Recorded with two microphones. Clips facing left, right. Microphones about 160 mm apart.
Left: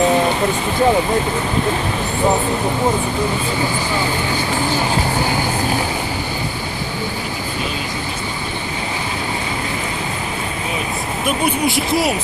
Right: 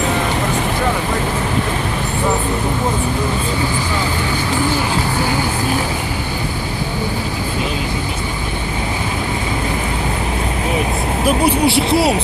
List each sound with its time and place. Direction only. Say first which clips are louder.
11.3 s speech: right 4 dB; 30° right (ahead or behind)